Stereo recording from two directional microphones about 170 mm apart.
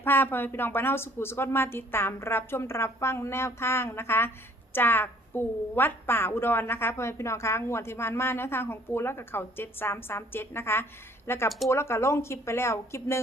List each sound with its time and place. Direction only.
0.0 s a woman's voice: 10° left (ahead or behind)